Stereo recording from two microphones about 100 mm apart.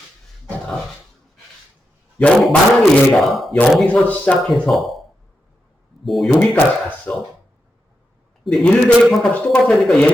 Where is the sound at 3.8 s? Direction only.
15° left (ahead or behind).